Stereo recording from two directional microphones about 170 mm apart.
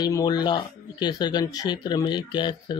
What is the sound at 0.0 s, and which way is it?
Speech, 25° left (ahead or behind).